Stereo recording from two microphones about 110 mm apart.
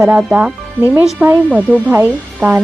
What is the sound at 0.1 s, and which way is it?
A woman's voice, 10° right (ahead or behind).